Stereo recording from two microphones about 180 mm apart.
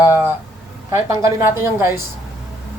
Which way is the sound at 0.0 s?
10° right (ahead or behind).